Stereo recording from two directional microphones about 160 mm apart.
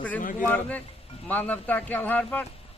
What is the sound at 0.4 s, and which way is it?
A man's voice, 10° left (ahead or behind).